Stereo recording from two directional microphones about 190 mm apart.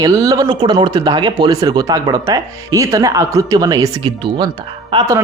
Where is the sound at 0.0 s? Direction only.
20° right (ahead or behind).